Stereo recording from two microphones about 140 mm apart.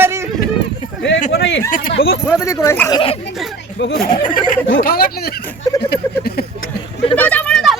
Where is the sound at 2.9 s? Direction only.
40° left (ahead or behind).